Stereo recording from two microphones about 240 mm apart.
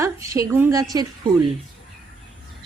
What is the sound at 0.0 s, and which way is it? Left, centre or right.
A woman's voice, centre.